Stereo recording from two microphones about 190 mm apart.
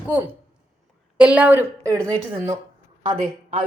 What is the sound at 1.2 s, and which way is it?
Speech, 5° right (ahead or behind).